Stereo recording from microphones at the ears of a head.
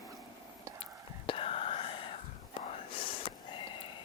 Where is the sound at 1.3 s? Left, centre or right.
Left.